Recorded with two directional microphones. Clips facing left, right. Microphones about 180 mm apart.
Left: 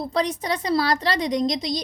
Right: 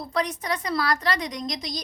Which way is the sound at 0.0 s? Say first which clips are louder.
Left 4 dB; 30° left (ahead or behind).